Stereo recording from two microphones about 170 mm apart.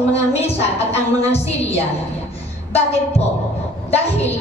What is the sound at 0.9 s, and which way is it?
A woman's voice, 40° left (ahead or behind).